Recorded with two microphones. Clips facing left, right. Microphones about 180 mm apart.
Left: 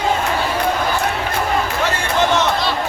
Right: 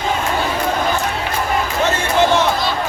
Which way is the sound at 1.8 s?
15° right (ahead or behind).